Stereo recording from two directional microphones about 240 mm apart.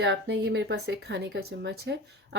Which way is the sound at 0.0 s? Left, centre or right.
Right.